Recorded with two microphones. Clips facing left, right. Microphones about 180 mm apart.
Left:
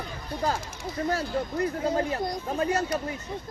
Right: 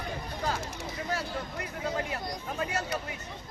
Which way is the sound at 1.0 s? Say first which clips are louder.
Left 7 dB; 40° left (ahead or behind).